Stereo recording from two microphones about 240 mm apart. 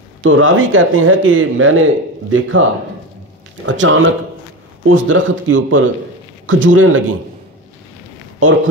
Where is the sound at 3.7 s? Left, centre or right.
Right.